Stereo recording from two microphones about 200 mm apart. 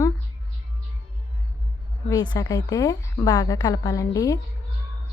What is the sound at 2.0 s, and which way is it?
A woman's voice, 20° left (ahead or behind).